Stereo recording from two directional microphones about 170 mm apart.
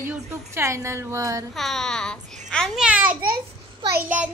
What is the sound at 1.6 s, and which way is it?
Speech, centre (ahead or behind).